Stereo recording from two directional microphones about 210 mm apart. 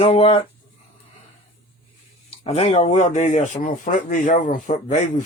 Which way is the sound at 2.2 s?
30° left (ahead or behind).